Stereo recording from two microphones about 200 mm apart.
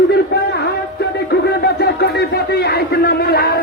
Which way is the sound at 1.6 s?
55° left (ahead or behind).